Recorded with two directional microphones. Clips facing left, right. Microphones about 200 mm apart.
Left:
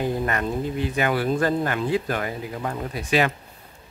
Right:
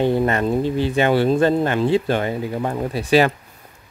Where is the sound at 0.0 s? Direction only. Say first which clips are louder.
Right 7 dB; 30° right (ahead or behind).